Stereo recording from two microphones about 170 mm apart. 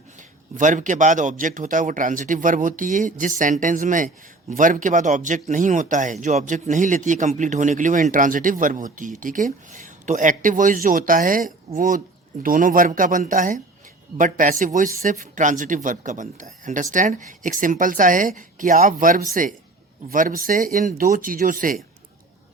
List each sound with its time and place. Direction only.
0.2 s speech: 45° right (ahead or behind)